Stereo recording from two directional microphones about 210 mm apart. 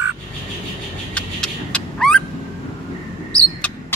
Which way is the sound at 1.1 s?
5° left (ahead or behind).